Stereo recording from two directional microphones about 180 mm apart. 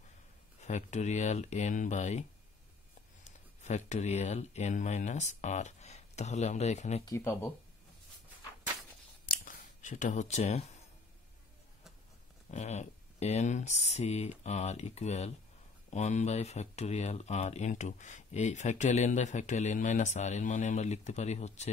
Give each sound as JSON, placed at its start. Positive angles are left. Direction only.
{"t": 0.6, "sound": "speech", "side_deg": 40}
{"t": 3.6, "sound": "speech", "side_deg": 40}
{"t": 7.1, "sound": "speech", "side_deg": 15}
{"t": 9.3, "sound": "a sound", "side_deg": 50}
{"t": 12.4, "sound": "speech", "side_deg": 40}